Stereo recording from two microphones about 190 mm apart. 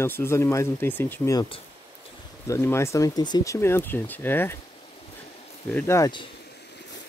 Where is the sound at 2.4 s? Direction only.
15° left (ahead or behind).